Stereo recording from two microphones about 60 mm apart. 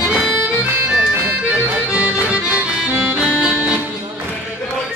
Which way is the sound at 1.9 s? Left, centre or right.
Centre.